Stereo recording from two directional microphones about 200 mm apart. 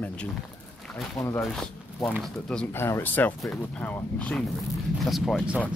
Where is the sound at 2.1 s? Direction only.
Centre (ahead or behind).